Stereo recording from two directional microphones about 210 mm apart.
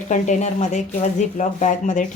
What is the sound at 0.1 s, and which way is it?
Speech, 35° left (ahead or behind).